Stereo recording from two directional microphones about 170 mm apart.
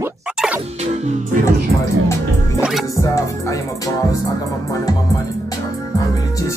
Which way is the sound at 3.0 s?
15° left (ahead or behind).